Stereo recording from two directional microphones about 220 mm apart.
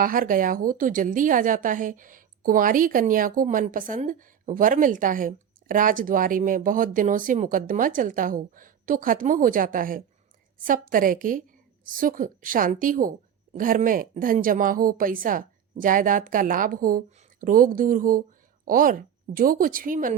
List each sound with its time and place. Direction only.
0.0 s a woman's voice: 40° right (ahead or behind)